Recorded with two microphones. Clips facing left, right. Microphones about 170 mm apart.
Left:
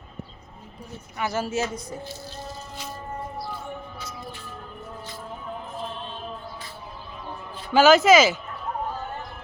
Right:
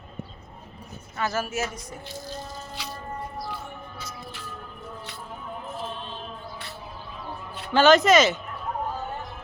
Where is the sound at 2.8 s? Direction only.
75° right (ahead or behind).